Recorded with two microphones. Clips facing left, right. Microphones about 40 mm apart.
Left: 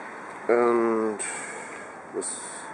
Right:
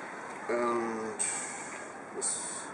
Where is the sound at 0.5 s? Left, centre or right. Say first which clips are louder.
Left 10 dB; left.